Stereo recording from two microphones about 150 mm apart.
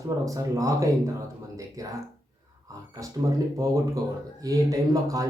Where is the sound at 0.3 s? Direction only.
20° right (ahead or behind).